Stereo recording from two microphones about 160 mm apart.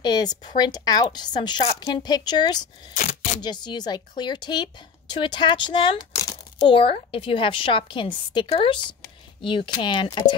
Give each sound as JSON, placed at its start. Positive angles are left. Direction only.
{"t": 0.0, "sound": "a woman's voice", "side_deg": 25}